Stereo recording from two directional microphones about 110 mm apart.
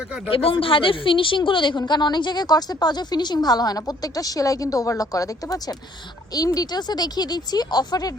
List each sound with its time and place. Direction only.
0.3 s a woman's voice: 55° left (ahead or behind); by 8.1 s 35° left (ahead or behind)